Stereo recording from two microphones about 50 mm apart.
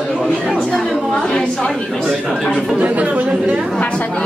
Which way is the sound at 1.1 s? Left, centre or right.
Left.